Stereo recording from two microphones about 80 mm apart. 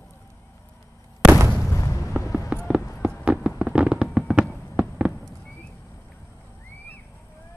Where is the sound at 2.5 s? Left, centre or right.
Centre.